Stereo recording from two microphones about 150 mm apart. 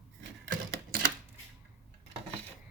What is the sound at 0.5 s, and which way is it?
Typewriter, 65° right (ahead or behind).